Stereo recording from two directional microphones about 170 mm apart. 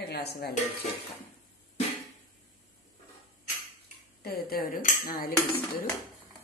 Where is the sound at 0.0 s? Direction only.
70° left (ahead or behind).